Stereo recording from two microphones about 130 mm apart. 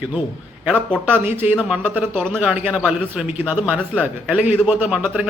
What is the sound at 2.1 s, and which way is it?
Speech, 5° left (ahead or behind).